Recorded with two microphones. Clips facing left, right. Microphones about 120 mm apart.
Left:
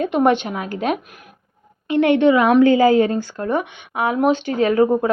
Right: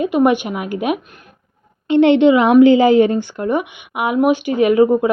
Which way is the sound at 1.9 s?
25° right (ahead or behind).